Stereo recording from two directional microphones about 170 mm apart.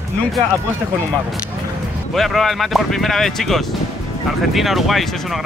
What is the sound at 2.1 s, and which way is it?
Speech, centre (ahead or behind).